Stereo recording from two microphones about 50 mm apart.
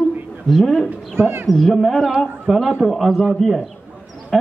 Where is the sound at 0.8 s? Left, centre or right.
Right.